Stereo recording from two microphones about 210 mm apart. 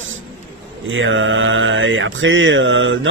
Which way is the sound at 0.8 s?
65° right (ahead or behind).